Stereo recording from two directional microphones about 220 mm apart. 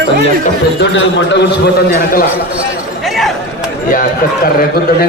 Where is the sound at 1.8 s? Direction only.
45° left (ahead or behind).